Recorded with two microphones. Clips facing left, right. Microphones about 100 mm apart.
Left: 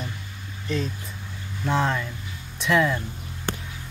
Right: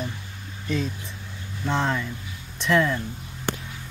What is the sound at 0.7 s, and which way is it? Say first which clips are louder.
Speech: right 1 dB; centre (ahead or behind).